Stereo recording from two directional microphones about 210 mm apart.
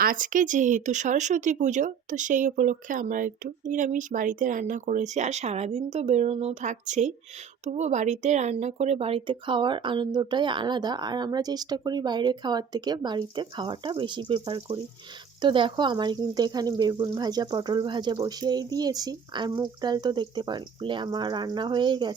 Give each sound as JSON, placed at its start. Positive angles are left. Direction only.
{"t": 0.0, "sound": "speech", "side_deg": -40}